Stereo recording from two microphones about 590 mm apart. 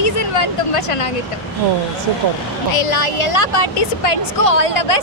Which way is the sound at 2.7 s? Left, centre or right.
Left.